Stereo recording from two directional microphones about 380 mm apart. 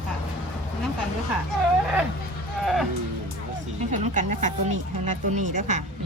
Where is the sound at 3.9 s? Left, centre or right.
Centre.